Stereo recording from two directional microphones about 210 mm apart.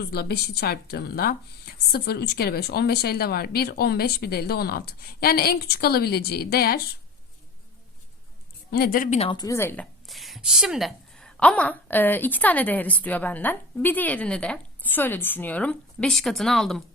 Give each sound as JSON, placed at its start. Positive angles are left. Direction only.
{"t": 0.1, "sound": "a woman's voice", "side_deg": 50}
{"t": 8.7, "sound": "speech", "side_deg": 45}